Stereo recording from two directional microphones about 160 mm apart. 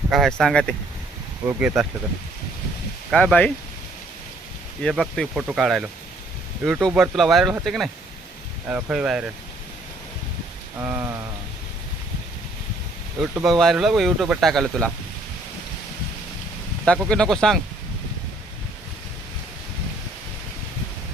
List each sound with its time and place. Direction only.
0.1 s speech: centre (ahead or behind)
3.1 s speech: 5° left (ahead or behind)
4.8 s speech: centre (ahead or behind)
10.8 s rain: 15° right (ahead or behind)
13.1 s rain: 10° right (ahead or behind)
13.5 s speech: centre (ahead or behind)
16.8 s speech: 5° left (ahead or behind)